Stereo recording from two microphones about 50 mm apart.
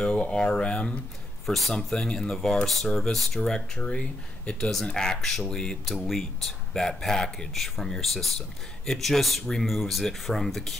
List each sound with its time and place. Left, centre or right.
0.0 s speech: centre
1.4 s a man's voice: centre
1.7 s speech: centre